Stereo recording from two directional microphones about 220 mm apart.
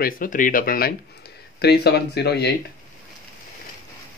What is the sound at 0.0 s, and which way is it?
Speech, 40° left (ahead or behind).